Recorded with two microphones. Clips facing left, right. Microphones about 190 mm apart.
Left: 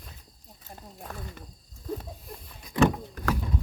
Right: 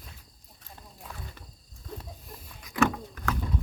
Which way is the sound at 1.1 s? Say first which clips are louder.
Left 4 dB; 55° left (ahead or behind).